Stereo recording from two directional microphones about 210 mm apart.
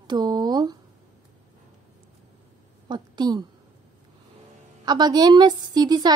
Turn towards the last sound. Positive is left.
turn(degrees=-20)  # may be behind; listen again after turning